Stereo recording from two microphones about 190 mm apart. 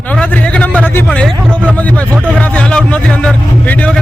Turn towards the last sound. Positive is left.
turn(degrees=5)  # may be behind; listen again after turning